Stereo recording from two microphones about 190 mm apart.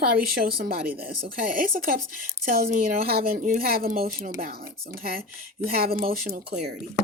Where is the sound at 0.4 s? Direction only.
50° right (ahead or behind).